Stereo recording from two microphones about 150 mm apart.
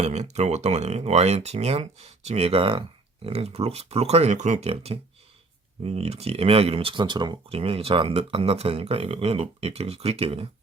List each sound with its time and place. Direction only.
0.0 s speech: 45° right (ahead or behind)